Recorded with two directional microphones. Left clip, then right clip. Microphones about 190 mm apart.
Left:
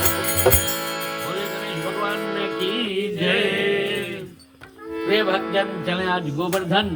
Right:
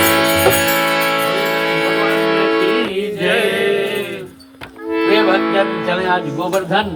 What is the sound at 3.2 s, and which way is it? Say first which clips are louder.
Mantra: right 6 dB; 5° left (ahead or behind).